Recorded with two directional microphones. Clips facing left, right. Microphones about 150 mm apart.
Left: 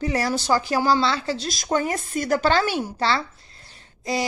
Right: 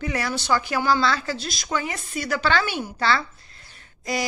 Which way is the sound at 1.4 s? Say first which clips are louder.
Left 4 dB; 45° left (ahead or behind).